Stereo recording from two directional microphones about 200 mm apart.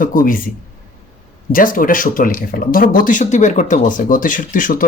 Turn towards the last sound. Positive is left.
turn(degrees=40)  # may be behind; listen again after turning